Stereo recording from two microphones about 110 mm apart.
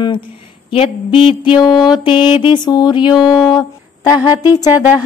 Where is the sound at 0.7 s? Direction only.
55° left (ahead or behind).